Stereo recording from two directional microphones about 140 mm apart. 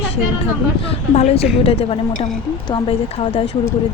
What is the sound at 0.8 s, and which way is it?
A woman's voice, 45° left (ahead or behind).